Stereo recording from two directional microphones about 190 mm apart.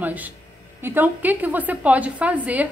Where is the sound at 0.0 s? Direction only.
10° right (ahead or behind).